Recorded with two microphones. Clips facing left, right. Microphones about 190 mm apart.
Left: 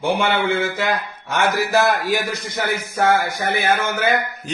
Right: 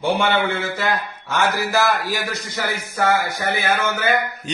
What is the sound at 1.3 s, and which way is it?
Speech, 20° left (ahead or behind).